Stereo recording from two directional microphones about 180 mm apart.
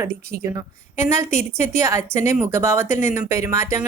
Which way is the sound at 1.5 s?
15° right (ahead or behind).